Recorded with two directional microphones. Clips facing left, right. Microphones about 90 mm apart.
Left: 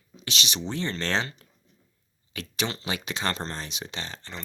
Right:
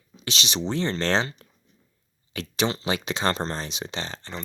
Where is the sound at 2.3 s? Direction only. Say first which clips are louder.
Right 5 dB; 25° right (ahead or behind).